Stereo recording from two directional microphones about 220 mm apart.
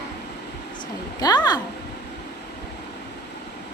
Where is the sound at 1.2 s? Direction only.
20° left (ahead or behind).